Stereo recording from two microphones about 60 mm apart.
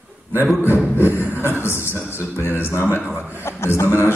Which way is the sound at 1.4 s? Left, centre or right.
Left.